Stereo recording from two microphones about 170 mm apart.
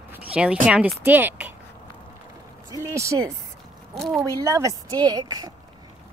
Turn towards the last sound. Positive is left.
turn(degrees=-25)  # may be behind; listen again after turning